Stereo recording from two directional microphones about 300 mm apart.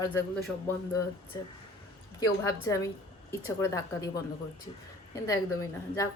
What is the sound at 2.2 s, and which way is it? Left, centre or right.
A woman's voice, centre.